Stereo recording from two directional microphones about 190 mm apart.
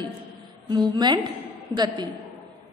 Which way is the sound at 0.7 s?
20° right (ahead or behind).